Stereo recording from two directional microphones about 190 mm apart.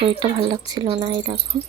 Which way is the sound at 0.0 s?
25° right (ahead or behind).